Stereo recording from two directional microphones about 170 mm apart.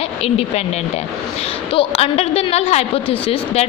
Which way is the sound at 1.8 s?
35° left (ahead or behind).